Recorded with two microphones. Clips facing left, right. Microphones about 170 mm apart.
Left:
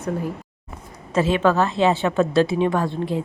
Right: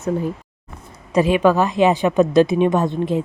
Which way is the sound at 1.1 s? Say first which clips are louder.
Right 3 dB; 15° right (ahead or behind).